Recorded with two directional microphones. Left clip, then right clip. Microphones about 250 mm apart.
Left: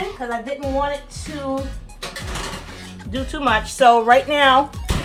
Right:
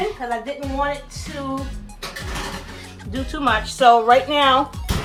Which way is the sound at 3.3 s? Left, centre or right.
Left.